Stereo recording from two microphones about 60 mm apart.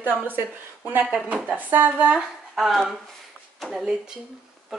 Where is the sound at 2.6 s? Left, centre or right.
Centre.